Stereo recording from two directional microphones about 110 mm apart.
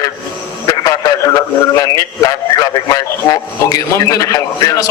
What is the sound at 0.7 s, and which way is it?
A man's voice, 35° left (ahead or behind).